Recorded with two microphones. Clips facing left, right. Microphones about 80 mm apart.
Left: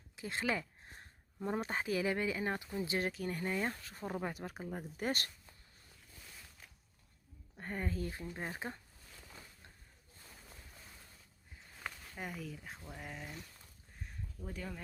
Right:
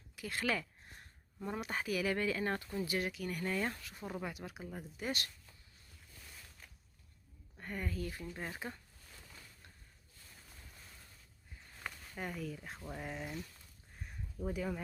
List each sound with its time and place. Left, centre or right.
0.2 s speech: left
2.9 s speech: left; by 3.8 s centre
4.0 s speech: left
7.6 s speech: left
11.7 s a sound: centre
13.0 s speech: centre
14.0 s a sound: centre